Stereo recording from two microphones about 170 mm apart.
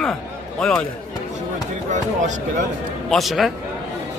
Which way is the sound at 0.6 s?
5° left (ahead or behind).